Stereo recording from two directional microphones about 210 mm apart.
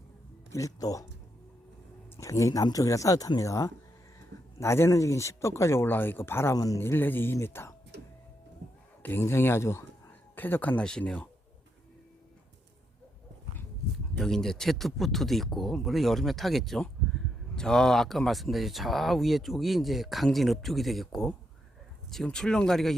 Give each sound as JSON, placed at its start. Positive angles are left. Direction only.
{"t": 0.5, "sound": "speech", "side_deg": 15}
{"t": 2.1, "sound": "speech", "side_deg": 15}
{"t": 9.0, "sound": "speech", "side_deg": 10}
{"t": 14.2, "sound": "speech", "side_deg": 0}